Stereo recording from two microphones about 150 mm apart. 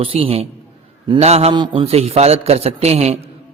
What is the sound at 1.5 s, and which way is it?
A man's voice, 35° right (ahead or behind).